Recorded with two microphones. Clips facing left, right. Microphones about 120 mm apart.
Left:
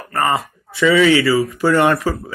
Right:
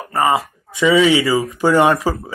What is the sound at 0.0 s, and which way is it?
Speech, 15° right (ahead or behind).